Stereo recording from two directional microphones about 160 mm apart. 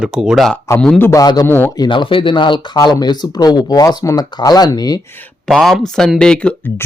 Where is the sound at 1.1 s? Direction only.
25° left (ahead or behind).